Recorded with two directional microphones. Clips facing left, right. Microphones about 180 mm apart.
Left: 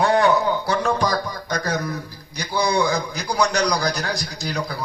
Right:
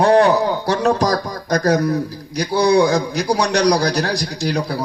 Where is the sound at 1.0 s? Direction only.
40° right (ahead or behind).